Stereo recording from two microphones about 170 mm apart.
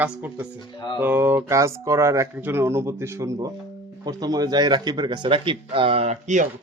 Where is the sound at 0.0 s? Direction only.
10° right (ahead or behind).